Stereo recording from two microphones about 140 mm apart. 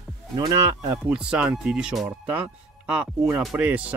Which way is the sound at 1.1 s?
5° right (ahead or behind).